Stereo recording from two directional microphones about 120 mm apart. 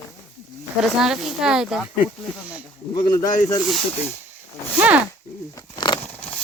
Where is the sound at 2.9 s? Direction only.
35° left (ahead or behind).